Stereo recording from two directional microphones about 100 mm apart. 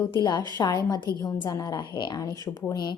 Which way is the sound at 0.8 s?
40° left (ahead or behind).